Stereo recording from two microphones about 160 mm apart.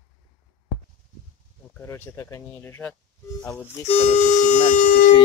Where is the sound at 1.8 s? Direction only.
15° left (ahead or behind).